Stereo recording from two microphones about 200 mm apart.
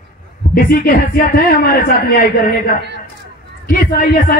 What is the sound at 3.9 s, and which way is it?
Speech, 50° left (ahead or behind).